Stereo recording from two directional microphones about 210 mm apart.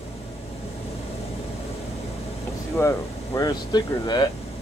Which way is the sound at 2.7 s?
15° left (ahead or behind).